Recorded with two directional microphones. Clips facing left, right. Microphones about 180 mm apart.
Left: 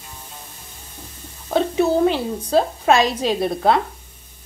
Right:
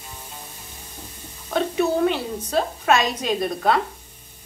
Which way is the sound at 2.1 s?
30° left (ahead or behind).